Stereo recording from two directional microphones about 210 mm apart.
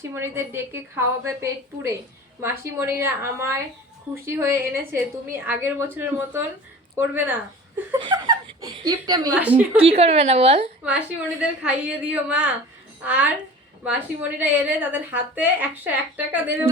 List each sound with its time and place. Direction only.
0.0 s a woman's voice: 10° right (ahead or behind)
9.4 s a woman's voice: 5° right (ahead or behind)
9.7 s a woman's voice: 30° right (ahead or behind)
10.8 s a woman's voice: 5° right (ahead or behind)